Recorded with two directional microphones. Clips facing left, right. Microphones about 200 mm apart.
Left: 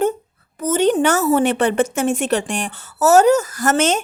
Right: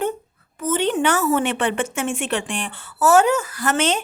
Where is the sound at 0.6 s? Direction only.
40° left (ahead or behind).